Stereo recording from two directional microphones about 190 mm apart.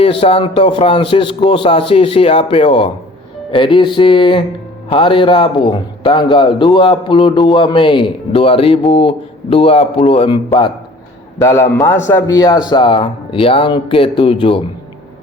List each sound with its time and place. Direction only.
0.0 s a man's voice: 30° left (ahead or behind)
11.3 s a man's voice: 15° left (ahead or behind)